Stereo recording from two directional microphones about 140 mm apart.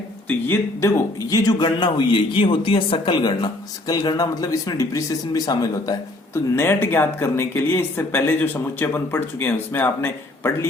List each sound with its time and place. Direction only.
0.3 s a man's voice: 15° left (ahead or behind)